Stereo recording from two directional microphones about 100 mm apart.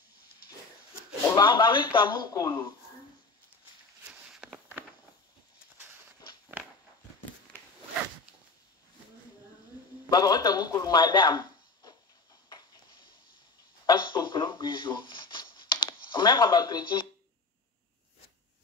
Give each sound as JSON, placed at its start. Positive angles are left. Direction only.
{"t": 1.3, "sound": "speech", "side_deg": 50}
{"t": 4.1, "sound": "a sound", "side_deg": -5}
{"t": 7.5, "sound": "zipper", "side_deg": 10}
{"t": 10.0, "sound": "a man's voice", "side_deg": 40}
{"t": 12.5, "sound": "a sound", "side_deg": 50}
{"t": 13.8, "sound": "speech", "side_deg": 50}